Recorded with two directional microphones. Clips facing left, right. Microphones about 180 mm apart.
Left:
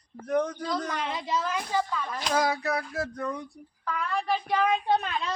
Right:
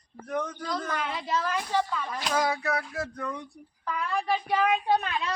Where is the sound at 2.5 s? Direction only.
35° left (ahead or behind).